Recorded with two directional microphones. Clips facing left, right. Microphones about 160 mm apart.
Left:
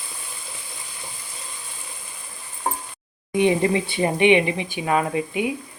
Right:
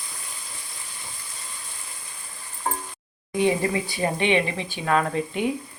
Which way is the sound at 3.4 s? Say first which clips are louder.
Left 3 dB; 20° left (ahead or behind).